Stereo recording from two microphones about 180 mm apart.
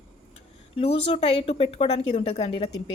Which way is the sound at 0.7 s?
35° left (ahead or behind).